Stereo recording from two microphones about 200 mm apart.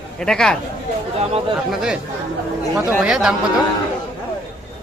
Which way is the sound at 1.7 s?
5° right (ahead or behind).